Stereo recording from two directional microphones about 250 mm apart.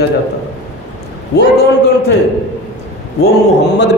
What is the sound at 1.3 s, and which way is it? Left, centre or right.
Speech, left.